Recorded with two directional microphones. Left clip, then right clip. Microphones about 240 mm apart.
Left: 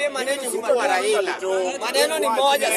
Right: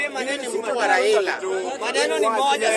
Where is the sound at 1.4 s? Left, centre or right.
Left.